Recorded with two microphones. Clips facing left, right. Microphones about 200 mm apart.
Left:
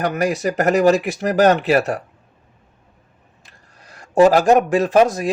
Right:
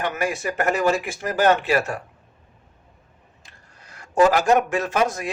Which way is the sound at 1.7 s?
35° left (ahead or behind).